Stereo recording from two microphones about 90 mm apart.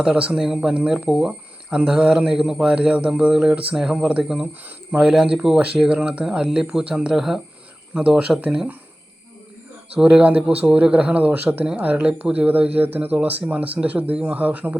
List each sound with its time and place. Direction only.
0.0 s speech: 10° right (ahead or behind)
10.0 s speech: 10° right (ahead or behind)